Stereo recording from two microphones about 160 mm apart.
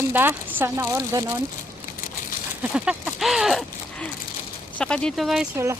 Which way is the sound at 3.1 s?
Centre (ahead or behind).